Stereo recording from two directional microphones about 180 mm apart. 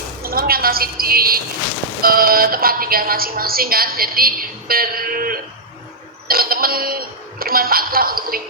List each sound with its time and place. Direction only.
0.2 s a woman's voice: 55° right (ahead or behind)